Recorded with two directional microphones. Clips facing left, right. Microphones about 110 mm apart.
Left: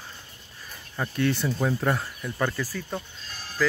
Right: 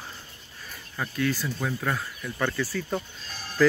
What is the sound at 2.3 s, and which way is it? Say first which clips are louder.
Speech: even; 10° left (ahead or behind).